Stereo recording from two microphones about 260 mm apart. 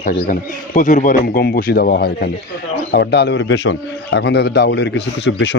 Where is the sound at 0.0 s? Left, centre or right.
Left.